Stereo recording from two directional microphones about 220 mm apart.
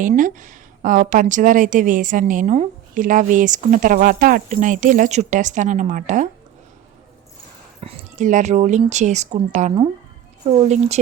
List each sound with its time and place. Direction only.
0.0 s a woman's voice: 35° right (ahead or behind)
7.8 s a woman's voice: 30° right (ahead or behind)